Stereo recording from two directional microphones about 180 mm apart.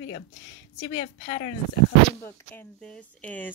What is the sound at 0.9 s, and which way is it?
Speech, 30° left (ahead or behind).